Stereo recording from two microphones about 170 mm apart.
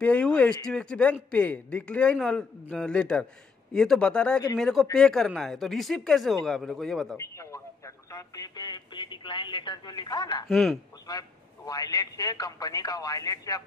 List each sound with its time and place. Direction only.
0.0 s a man's voice: 5° left (ahead or behind)
7.2 s speech: 15° left (ahead or behind)
10.5 s speech: centre (ahead or behind)
11.1 s speech: 20° left (ahead or behind)